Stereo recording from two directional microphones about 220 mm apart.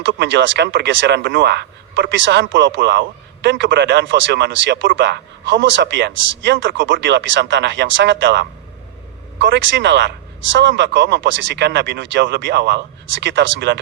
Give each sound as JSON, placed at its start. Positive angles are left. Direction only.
{"t": 0.0, "sound": "speech", "side_deg": -55}